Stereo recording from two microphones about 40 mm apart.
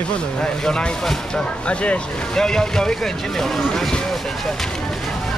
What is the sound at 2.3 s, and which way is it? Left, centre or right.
Speech, centre.